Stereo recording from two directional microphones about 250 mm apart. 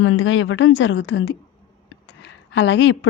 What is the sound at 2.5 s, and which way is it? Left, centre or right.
Speech, left.